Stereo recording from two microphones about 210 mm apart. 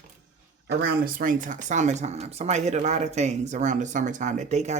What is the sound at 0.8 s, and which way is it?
Speech, 45° right (ahead or behind).